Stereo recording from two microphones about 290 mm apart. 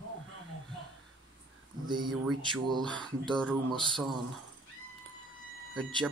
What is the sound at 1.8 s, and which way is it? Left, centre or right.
Speech, centre.